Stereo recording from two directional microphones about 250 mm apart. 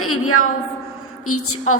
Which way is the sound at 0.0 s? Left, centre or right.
Left.